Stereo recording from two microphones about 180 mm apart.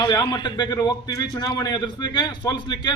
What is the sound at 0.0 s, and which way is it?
A man's voice, 25° left (ahead or behind).